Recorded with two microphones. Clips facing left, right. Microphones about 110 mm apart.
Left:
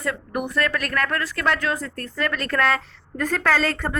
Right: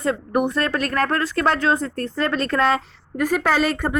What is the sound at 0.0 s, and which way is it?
A woman's voice, 25° right (ahead or behind).